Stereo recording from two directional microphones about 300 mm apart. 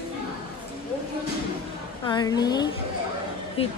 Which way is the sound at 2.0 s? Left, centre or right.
Centre.